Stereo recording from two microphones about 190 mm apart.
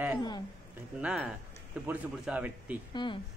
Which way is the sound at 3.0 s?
25° left (ahead or behind).